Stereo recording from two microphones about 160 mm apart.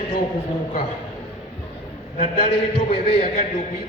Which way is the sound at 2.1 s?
35° left (ahead or behind).